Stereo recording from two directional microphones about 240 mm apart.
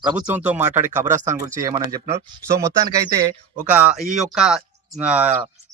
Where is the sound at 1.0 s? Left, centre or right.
Right.